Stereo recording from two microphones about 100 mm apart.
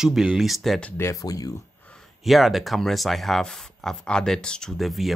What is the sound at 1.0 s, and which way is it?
Speech, 35° left (ahead or behind).